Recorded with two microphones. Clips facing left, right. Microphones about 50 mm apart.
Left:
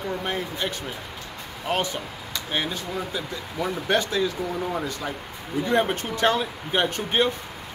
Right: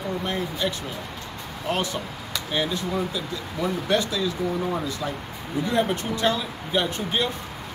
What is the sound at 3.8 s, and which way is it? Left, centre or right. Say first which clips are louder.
Speech: left 2 dB; left.